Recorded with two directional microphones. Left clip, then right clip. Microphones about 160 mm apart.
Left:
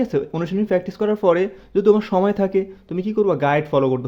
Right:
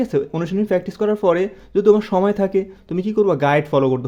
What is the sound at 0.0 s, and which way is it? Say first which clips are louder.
Speech: right 1 dB; 25° right (ahead or behind).